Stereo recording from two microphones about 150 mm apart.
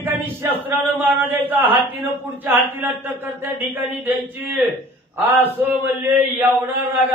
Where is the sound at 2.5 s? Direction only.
15° right (ahead or behind).